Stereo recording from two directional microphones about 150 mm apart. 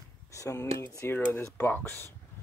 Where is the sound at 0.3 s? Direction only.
20° left (ahead or behind).